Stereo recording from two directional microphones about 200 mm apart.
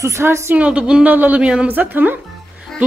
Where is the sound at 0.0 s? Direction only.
15° right (ahead or behind).